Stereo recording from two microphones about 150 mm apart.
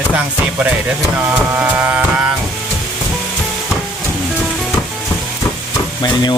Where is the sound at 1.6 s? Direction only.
10° right (ahead or behind).